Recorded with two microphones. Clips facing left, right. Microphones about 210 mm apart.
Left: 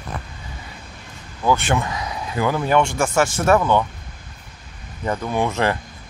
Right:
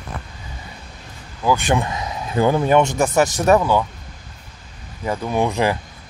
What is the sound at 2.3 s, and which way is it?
Speech, 25° right (ahead or behind).